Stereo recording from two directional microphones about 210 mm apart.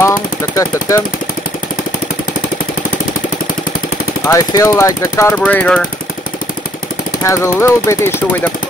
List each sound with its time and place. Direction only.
0.0 s jackhammer: 15° left (ahead or behind)
4.3 s speech: 15° left (ahead or behind)
7.2 s speech: 15° left (ahead or behind)